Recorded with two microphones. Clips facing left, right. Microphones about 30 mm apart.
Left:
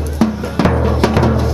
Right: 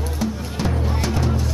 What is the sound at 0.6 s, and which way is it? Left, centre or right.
Music, left.